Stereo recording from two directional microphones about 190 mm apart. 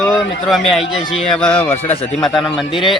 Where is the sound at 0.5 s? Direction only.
Centre (ahead or behind).